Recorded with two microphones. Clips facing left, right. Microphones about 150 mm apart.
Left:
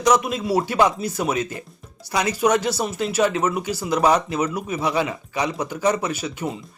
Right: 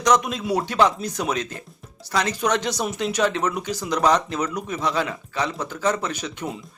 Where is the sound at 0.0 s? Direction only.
5° left (ahead or behind).